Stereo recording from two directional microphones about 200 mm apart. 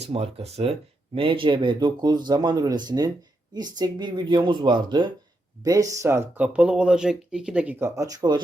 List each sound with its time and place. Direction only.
0.0 s speech: 30° right (ahead or behind)